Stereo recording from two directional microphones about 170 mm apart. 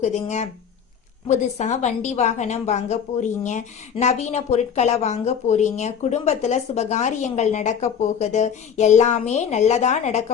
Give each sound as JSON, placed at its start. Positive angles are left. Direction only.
{"t": 0.0, "sound": "a woman's voice", "side_deg": 40}